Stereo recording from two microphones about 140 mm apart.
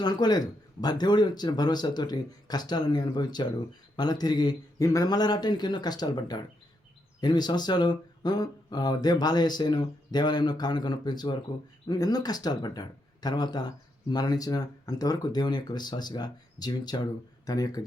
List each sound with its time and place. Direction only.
0.0 s speech: 30° left (ahead or behind)